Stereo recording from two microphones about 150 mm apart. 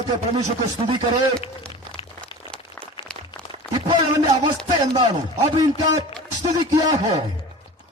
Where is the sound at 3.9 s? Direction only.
35° right (ahead or behind).